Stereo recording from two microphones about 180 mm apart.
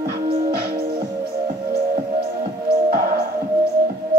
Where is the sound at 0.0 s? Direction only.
55° right (ahead or behind).